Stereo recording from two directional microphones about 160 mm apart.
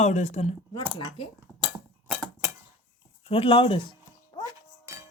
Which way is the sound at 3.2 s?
35° left (ahead or behind).